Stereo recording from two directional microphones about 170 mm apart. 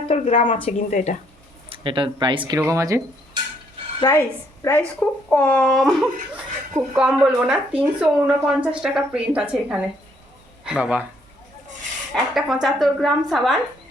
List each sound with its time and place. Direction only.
0.1 s a woman's voice: 40° left (ahead or behind)
1.7 s speech: 30° right (ahead or behind)
2.6 s speech: 20° right (ahead or behind)
4.0 s speech: 15° left (ahead or behind); by 11.0 s 5° right (ahead or behind)
12.1 s speech: centre (ahead or behind)